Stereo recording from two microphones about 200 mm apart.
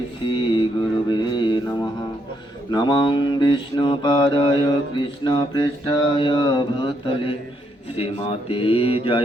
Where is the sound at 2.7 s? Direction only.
20° left (ahead or behind).